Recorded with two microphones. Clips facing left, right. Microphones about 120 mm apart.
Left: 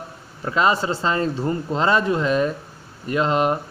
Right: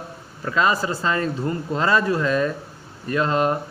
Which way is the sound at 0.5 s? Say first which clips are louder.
Left 1 dB; 25° left (ahead or behind).